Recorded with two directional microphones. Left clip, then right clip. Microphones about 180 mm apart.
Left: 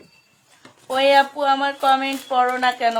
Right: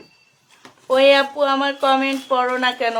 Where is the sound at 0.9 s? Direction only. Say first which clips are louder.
Right 2 dB; 35° right (ahead or behind).